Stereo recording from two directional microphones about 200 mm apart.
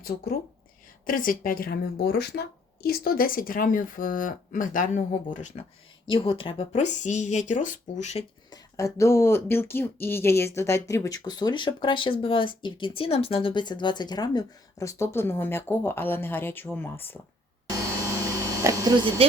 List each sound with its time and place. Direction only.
1.0 s speech: 45° left (ahead or behind)
6.1 s speech: 25° left (ahead or behind)
8.4 s speech: 15° left (ahead or behind)
18.6 s speech: 15° right (ahead or behind)